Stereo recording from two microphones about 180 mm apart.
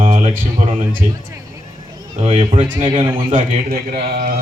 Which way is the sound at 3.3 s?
55° right (ahead or behind).